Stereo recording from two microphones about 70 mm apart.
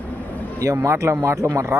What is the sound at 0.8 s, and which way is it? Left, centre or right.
Speech, right.